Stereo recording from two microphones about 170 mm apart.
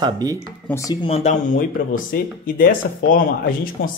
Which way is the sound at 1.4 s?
55° left (ahead or behind).